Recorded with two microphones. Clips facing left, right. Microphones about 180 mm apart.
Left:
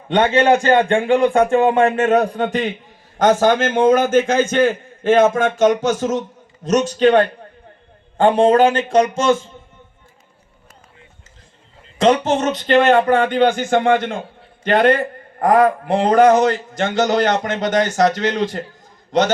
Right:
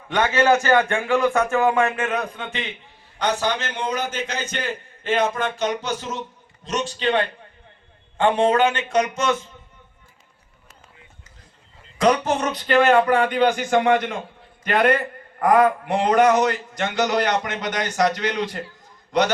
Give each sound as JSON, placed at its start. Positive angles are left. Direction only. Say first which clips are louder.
{"t": 0.1, "sound": "a man's voice", "louder": "left 4 dB", "side_deg": 25}
{"t": 8.2, "sound": "a man's voice", "louder": "left 5 dB", "side_deg": 35}
{"t": 11.9, "sound": "a man's voice", "louder": "left 4 dB", "side_deg": 25}
{"t": 15.5, "sound": "a man's voice", "louder": "left 3 dB", "side_deg": 45}
{"t": 15.9, "sound": "a man's voice", "louder": "left 5 dB", "side_deg": 30}